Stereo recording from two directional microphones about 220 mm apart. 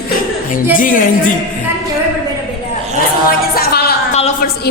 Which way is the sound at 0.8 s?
40° left (ahead or behind).